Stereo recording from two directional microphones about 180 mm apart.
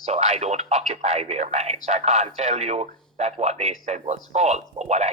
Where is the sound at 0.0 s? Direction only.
35° right (ahead or behind).